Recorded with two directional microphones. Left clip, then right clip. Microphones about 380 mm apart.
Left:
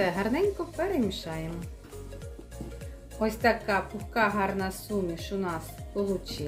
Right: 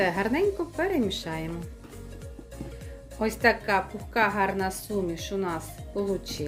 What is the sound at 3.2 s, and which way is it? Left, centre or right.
Speech, centre.